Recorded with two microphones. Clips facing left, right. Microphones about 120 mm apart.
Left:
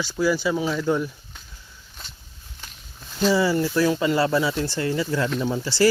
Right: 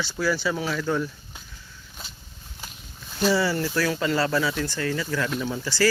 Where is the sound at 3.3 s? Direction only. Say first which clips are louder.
Left 3 dB; 15° left (ahead or behind).